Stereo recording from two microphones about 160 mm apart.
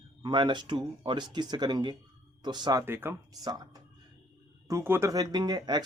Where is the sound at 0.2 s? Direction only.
30° right (ahead or behind).